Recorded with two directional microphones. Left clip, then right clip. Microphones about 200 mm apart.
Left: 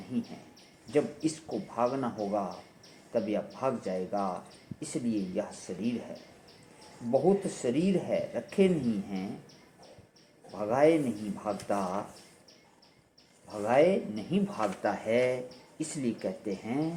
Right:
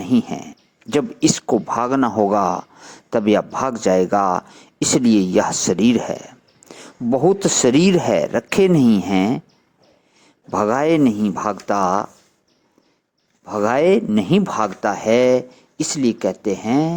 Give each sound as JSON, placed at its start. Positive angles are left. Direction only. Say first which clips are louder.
{"t": 0.1, "sound": "speech", "louder": "right 18 dB", "side_deg": -45}
{"t": 7.6, "sound": "speech", "louder": "right 15 dB", "side_deg": -55}
{"t": 10.5, "sound": "speech", "louder": "right 9 dB", "side_deg": -45}
{"t": 13.5, "sound": "speech", "louder": "right 10 dB", "side_deg": -45}